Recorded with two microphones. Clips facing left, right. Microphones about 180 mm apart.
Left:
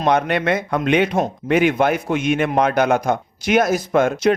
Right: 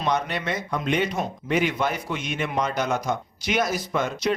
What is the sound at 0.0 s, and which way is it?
A man's voice, 60° left (ahead or behind).